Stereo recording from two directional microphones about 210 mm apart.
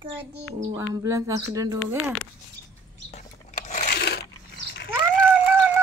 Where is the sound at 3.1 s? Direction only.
35° left (ahead or behind); by 4.3 s 50° left (ahead or behind).